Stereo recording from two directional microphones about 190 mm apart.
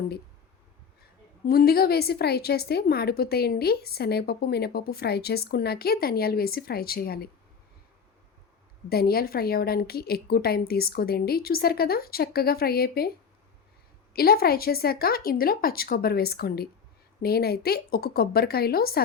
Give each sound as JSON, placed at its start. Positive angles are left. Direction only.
{"t": 1.5, "sound": "a woman's voice", "side_deg": 55}
{"t": 8.9, "sound": "a woman's voice", "side_deg": 55}
{"t": 14.1, "sound": "a woman's voice", "side_deg": 55}